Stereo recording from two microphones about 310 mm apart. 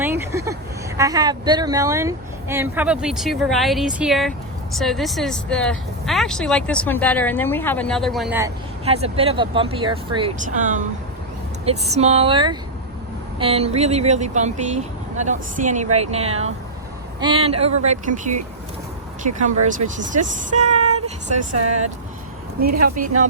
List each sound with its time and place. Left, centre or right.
0.0 s vehicle: centre
0.9 s speech: centre
8.8 s speech: centre
20.5 s child singing: right
20.7 s child singing: right